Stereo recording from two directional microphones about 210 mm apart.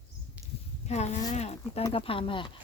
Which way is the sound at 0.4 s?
5° right (ahead or behind).